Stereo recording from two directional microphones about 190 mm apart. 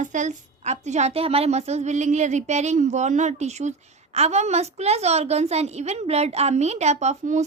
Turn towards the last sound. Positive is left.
turn(degrees=-40)  # may be behind; listen again after turning